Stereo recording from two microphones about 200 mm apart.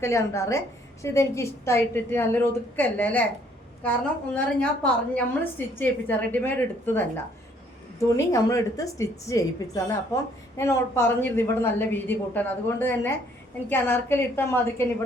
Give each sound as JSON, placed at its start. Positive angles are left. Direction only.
{"t": 0.0, "sound": "a woman's voice", "side_deg": 15}
{"t": 4.4, "sound": "a woman's voice", "side_deg": 5}